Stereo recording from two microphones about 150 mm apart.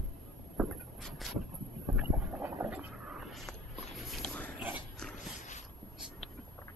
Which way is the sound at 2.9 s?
Centre (ahead or behind).